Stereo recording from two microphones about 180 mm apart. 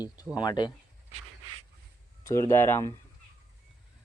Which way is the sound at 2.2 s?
15° left (ahead or behind).